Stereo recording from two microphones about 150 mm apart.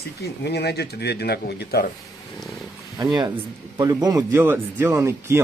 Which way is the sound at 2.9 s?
25° right (ahead or behind).